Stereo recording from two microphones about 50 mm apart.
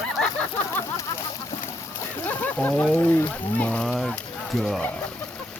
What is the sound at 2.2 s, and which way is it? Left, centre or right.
Splash, left.